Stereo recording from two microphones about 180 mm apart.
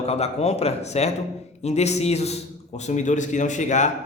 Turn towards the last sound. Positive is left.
turn(degrees=40)  # may be behind; listen again after turning